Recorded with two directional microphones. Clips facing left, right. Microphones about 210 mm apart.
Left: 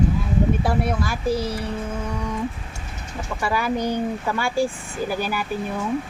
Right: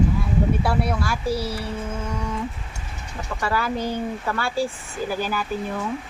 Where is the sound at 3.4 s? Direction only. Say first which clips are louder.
Left 2 dB; 15° left (ahead or behind).